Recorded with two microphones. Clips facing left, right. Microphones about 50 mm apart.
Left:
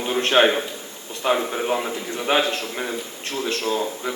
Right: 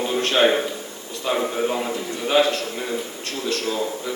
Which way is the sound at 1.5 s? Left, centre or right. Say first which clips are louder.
Even; centre.